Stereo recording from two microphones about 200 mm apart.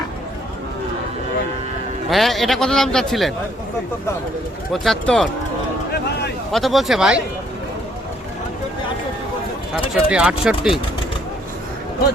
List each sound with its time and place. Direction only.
2.0 s a man's voice: centre (ahead or behind)
4.7 s a man's voice: centre (ahead or behind)
6.5 s a man's voice: centre (ahead or behind)
9.9 s a man's voice: 5° right (ahead or behind)